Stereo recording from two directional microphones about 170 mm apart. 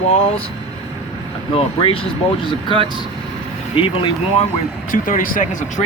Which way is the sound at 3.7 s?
30° left (ahead or behind).